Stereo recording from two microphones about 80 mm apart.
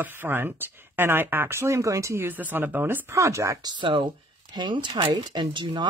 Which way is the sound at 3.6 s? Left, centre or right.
Right.